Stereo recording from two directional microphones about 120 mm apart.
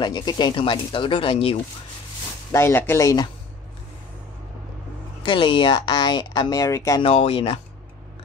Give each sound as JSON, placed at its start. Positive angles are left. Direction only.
{"t": 0.0, "sound": "speech", "side_deg": 40}
{"t": 2.5, "sound": "speech", "side_deg": 20}
{"t": 5.2, "sound": "speech", "side_deg": 45}
{"t": 7.0, "sound": "speech", "side_deg": 50}